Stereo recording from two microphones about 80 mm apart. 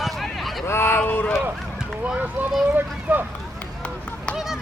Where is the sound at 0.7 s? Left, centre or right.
Left.